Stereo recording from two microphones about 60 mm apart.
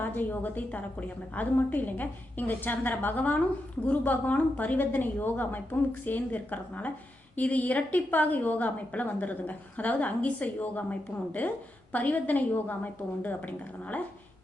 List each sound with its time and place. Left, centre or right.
0.0 s a woman's voice: left